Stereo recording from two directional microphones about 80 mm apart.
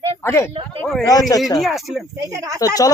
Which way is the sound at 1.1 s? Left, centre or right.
Left.